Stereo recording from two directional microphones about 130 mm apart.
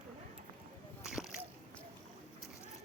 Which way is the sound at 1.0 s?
5° right (ahead or behind).